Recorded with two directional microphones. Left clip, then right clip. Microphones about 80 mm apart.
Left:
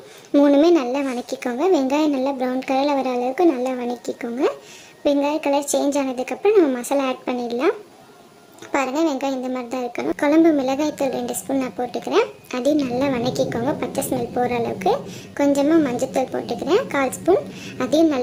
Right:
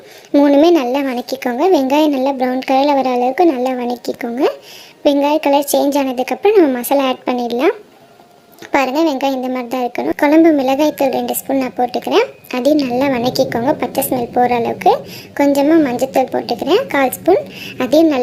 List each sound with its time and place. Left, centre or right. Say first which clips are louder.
0.3 s a woman's voice: right 5 dB; centre